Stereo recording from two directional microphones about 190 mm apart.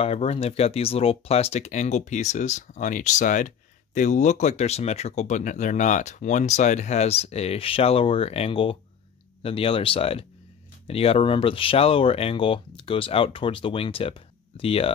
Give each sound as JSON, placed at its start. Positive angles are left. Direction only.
{"t": 0.0, "sound": "speech", "side_deg": 30}